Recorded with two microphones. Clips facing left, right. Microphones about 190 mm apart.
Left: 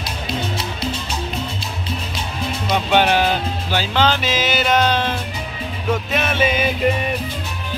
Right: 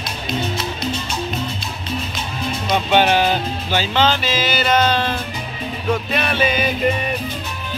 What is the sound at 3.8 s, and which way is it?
Music, 10° left (ahead or behind).